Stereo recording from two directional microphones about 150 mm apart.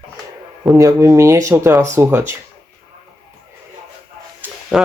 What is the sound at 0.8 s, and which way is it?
Speech, 20° right (ahead or behind).